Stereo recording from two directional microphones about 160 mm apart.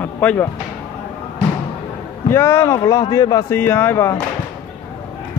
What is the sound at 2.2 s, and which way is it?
Speech, 15° left (ahead or behind).